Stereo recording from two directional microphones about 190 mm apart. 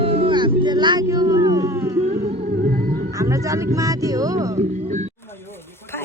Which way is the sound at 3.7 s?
15° right (ahead or behind).